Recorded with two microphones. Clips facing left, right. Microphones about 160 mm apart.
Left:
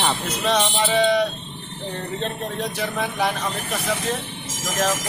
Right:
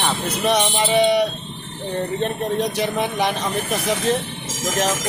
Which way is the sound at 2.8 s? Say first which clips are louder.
Right 3 dB; 20° right (ahead or behind).